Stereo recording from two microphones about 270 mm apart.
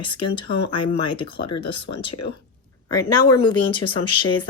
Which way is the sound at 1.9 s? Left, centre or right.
Left.